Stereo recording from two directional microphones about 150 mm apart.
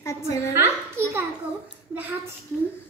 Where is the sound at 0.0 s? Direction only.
20° left (ahead or behind).